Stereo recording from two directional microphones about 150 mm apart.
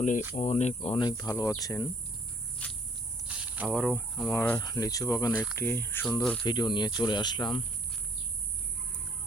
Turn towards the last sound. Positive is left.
turn(degrees=30)  # may be behind; listen again after turning